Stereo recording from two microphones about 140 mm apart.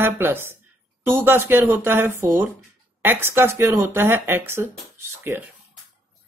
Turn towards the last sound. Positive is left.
turn(degrees=-15)  # may be behind; listen again after turning